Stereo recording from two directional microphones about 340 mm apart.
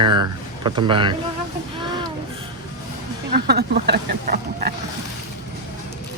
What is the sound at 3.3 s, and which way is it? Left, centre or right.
Speech, right.